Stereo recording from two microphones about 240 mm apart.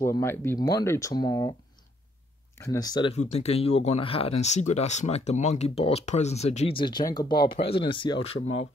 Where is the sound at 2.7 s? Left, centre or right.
Centre.